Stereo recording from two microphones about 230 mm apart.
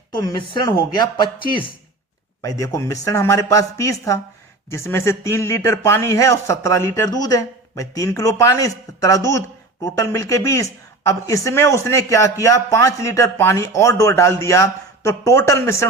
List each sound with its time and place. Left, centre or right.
0.2 s speech: centre
2.4 s speech: centre